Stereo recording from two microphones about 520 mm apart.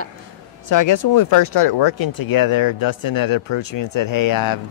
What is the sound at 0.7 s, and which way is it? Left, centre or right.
Speech, left.